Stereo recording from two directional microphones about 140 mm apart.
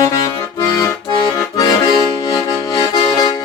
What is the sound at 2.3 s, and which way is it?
Accordion, 25° left (ahead or behind).